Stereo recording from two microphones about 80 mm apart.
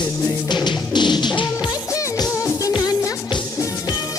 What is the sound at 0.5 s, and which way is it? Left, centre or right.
Music, left.